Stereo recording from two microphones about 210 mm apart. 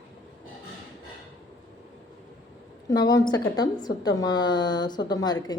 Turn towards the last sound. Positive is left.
turn(degrees=20)  # may be behind; listen again after turning